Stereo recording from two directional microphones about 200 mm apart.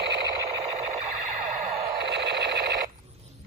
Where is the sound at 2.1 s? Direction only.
55° right (ahead or behind).